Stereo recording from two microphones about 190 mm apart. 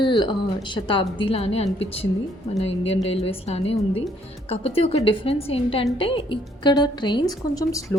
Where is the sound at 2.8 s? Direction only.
30° left (ahead or behind).